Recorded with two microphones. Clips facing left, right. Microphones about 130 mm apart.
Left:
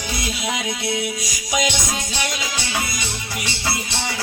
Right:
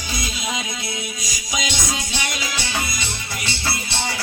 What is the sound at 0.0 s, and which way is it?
Music, 65° left (ahead or behind).